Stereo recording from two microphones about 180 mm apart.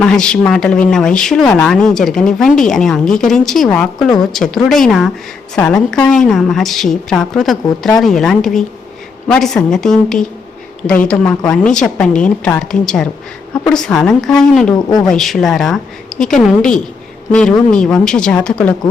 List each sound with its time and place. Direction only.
0.0 s speech: 5° left (ahead or behind)
14.7 s speech: 20° left (ahead or behind)
15.0 s speech: centre (ahead or behind)